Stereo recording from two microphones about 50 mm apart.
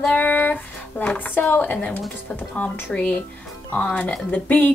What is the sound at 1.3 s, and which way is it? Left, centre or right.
Speech, left.